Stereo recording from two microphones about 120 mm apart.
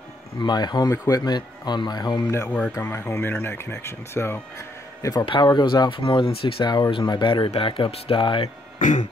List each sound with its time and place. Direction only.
0.4 s speech: 35° left (ahead or behind)
2.4 s speech: 10° left (ahead or behind)
2.7 s speech: 20° left (ahead or behind)
5.2 s speech: 45° left (ahead or behind)
8.7 s music: 90° left